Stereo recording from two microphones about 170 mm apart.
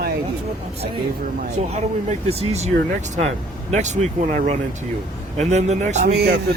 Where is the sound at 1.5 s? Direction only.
40° right (ahead or behind).